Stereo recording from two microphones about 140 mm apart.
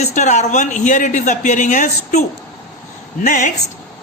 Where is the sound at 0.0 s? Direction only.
55° left (ahead or behind).